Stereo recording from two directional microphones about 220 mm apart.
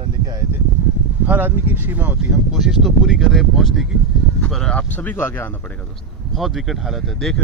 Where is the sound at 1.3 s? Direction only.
10° right (ahead or behind); by 5.5 s 10° left (ahead or behind).